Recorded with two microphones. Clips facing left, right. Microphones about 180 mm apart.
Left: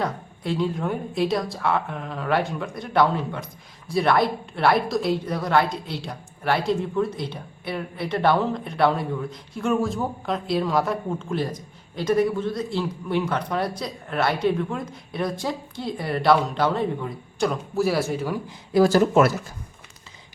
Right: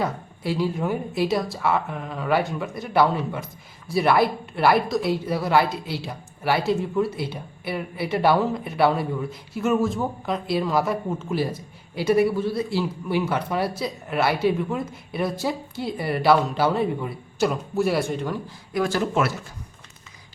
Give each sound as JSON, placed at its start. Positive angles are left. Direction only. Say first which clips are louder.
{"t": 0.0, "sound": "a woman's voice", "louder": "right 1 dB", "side_deg": -5}
{"t": 18.7, "sound": "speech", "louder": "left 6 dB", "side_deg": 35}